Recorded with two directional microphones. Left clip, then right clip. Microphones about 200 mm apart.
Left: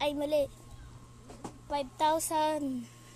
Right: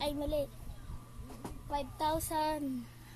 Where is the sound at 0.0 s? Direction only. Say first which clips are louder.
Left 5 dB; 35° left (ahead or behind).